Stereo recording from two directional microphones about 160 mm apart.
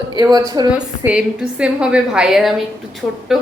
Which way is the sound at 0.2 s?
25° right (ahead or behind).